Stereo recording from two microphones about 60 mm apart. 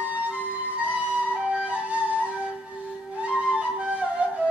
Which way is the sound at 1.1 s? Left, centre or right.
Right.